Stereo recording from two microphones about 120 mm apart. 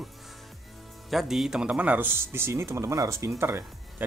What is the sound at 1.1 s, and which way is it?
Speech, centre (ahead or behind).